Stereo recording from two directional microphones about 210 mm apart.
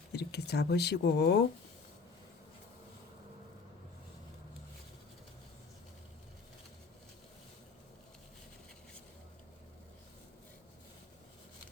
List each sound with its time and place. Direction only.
0.1 s speech: 50° left (ahead or behind)